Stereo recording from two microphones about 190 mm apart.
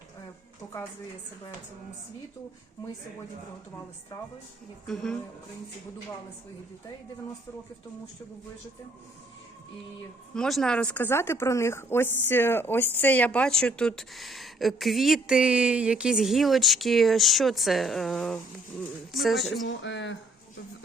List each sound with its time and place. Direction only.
4.1 s a woman's voice: 20° left (ahead or behind)
4.9 s speech: centre (ahead or behind)
10.3 s speech: 5° left (ahead or behind)
19.6 s speech: 75° left (ahead or behind)